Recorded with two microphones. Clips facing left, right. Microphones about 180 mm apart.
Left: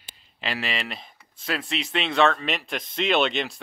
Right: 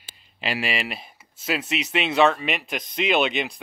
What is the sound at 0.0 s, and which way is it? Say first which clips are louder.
Speech: right 2 dB; 10° right (ahead or behind).